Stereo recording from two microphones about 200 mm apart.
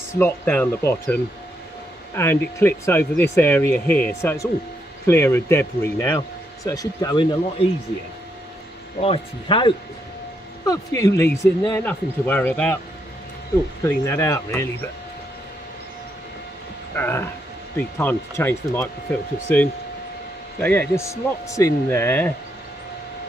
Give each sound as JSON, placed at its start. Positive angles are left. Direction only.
{"t": 0.1, "sound": "speech", "side_deg": 10}
{"t": 9.0, "sound": "speech", "side_deg": 25}
{"t": 13.8, "sound": "speech", "side_deg": 15}
{"t": 16.9, "sound": "speech", "side_deg": 10}